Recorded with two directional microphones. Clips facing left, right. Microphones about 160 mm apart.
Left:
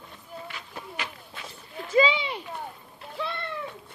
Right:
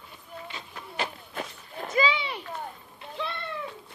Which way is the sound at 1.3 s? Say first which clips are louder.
Right 5 dB; 50° right (ahead or behind).